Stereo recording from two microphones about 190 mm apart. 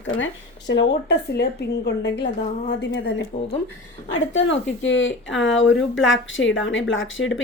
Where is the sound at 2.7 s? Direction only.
80° left.